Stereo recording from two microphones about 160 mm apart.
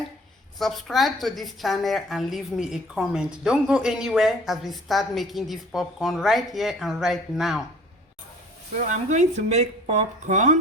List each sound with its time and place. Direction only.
0.6 s a woman's voice: centre (ahead or behind)
8.9 s speech: 50° right (ahead or behind)